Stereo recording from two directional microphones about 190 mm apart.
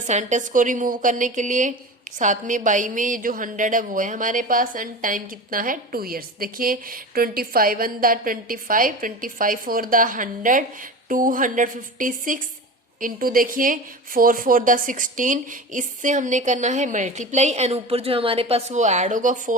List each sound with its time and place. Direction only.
0.1 s a woman's voice: 40° right (ahead or behind)